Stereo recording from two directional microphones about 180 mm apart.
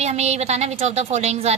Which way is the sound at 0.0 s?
35° right (ahead or behind).